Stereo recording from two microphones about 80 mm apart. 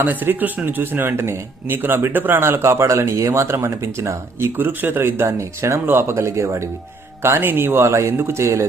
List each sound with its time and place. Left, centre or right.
0.0 s a man's voice: right